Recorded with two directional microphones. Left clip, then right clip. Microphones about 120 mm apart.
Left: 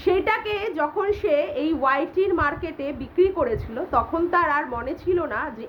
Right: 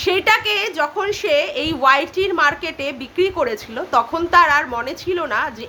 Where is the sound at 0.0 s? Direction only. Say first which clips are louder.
Right 6 dB; 20° right (ahead or behind).